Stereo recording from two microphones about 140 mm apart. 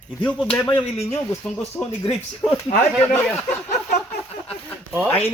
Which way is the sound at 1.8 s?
15° left (ahead or behind).